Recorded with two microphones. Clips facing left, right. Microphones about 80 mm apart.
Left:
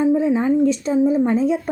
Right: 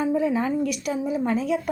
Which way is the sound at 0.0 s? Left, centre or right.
Left.